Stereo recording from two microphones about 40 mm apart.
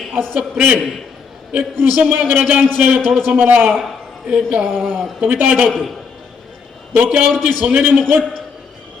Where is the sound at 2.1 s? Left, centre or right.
Right.